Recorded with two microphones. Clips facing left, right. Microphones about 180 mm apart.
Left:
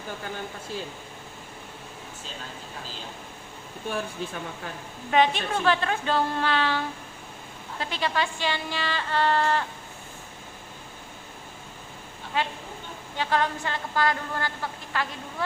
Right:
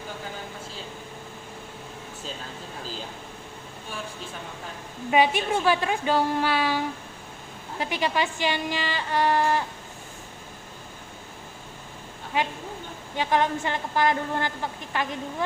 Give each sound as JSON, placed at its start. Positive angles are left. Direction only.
{"t": 5.1, "sound": "speech", "side_deg": -10}
{"t": 12.4, "sound": "a woman's voice", "side_deg": -15}